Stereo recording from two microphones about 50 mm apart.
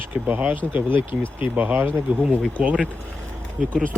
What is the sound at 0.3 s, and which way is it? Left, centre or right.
Speech, right.